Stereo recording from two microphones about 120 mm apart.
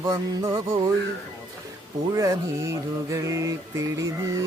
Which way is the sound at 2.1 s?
25° right (ahead or behind).